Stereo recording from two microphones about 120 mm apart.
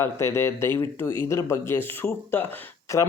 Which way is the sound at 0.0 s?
20° left (ahead or behind).